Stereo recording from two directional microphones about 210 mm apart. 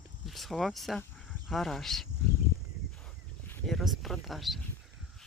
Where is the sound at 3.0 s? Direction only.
Centre (ahead or behind).